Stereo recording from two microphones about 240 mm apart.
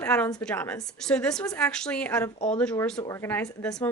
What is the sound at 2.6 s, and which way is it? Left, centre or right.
Speech, centre.